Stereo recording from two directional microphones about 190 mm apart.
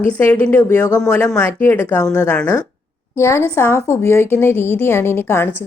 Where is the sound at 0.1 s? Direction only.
10° left (ahead or behind).